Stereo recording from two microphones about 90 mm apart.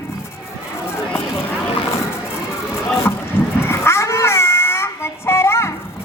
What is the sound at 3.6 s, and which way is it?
Child singing, 30° left (ahead or behind).